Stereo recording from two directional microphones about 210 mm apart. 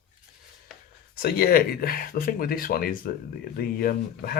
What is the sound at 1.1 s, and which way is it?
Speech, 45° left (ahead or behind).